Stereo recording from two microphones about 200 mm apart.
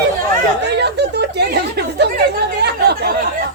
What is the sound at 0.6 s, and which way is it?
Chatter, 55° right (ahead or behind).